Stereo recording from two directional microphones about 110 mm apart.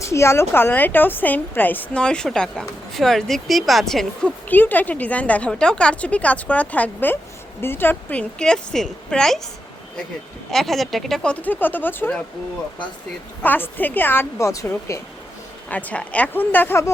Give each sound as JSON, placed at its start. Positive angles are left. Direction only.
{"t": 0.0, "sound": "a woman's voice", "side_deg": 25}
{"t": 4.4, "sound": "a woman's voice", "side_deg": 15}
{"t": 8.4, "sound": "a woman's voice", "side_deg": 5}
{"t": 10.5, "sound": "a woman's voice", "side_deg": 0}
{"t": 13.4, "sound": "a woman's voice", "side_deg": 15}
{"t": 15.7, "sound": "a woman's voice", "side_deg": 10}